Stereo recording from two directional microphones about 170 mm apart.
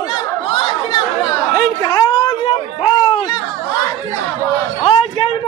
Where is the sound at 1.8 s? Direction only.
25° left (ahead or behind).